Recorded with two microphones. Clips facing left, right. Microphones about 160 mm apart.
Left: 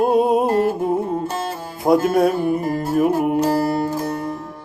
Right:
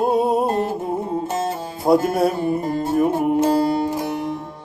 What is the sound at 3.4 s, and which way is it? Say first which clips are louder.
Music: right 1 dB; 20° right (ahead or behind).